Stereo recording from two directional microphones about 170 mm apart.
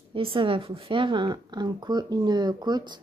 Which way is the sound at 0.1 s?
30° right (ahead or behind).